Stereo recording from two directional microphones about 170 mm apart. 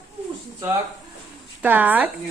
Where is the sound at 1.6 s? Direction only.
10° right (ahead or behind).